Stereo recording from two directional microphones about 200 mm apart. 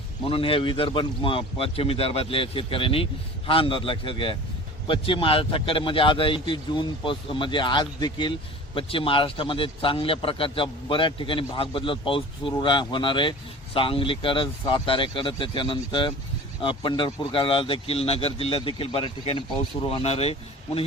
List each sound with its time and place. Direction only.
0.3 s a man's voice: 25° left (ahead or behind)